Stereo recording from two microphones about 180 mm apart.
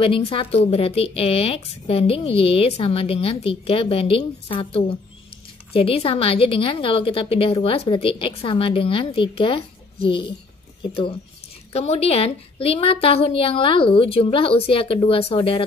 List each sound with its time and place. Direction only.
0.0 s a woman's voice: 30° left (ahead or behind)